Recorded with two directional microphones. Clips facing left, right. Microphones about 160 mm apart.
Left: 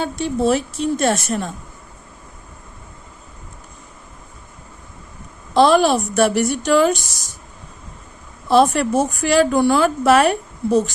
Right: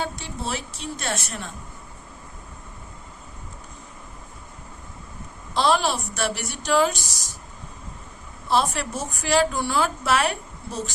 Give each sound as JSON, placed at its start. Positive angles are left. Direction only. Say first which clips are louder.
{"t": 0.2, "sound": "a woman's voice", "louder": "left 13 dB", "side_deg": 50}
{"t": 5.5, "sound": "a woman's voice", "louder": "left 8 dB", "side_deg": 55}
{"t": 8.4, "sound": "speech", "louder": "left 9 dB", "side_deg": 55}